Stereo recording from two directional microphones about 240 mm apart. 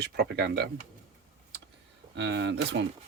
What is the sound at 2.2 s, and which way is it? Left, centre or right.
Speech, right.